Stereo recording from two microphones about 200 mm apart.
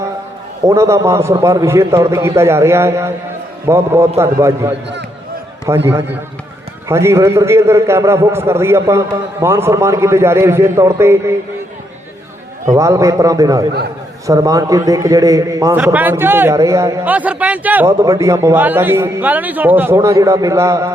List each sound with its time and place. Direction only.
0.7 s a man's voice: 15° right (ahead or behind)
12.7 s a man's voice: 15° right (ahead or behind)